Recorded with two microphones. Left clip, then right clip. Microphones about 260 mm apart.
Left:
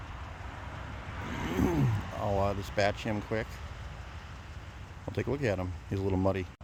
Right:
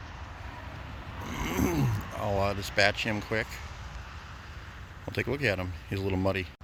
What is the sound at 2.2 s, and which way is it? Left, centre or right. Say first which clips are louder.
Speech: right 1 dB; centre.